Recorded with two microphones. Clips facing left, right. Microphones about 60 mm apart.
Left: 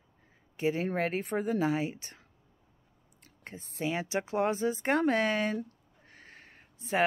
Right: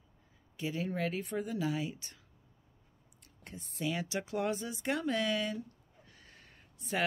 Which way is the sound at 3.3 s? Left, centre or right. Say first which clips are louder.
Left 3 dB; left.